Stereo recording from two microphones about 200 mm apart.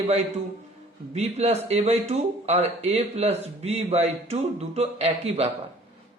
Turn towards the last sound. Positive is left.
turn(degrees=-30)  # may be behind; listen again after turning